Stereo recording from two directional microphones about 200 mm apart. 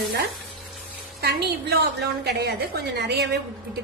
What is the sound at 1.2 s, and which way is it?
A woman's voice, 55° right (ahead or behind).